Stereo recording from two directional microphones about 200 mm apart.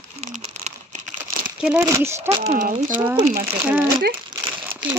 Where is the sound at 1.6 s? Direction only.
15° right (ahead or behind).